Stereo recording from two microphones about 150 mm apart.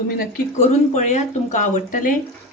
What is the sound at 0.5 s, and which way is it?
Speech, 50° left (ahead or behind).